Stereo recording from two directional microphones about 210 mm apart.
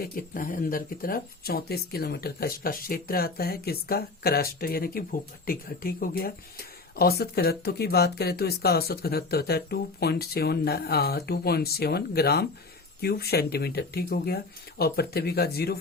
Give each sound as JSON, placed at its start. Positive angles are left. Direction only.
{"t": 0.0, "sound": "speech", "side_deg": 45}